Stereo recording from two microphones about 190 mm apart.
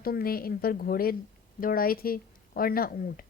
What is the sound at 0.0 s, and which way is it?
Speech, 50° left (ahead or behind).